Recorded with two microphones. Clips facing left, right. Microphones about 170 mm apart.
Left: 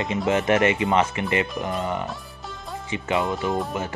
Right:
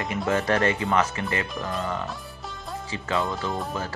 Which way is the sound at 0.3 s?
20° left (ahead or behind).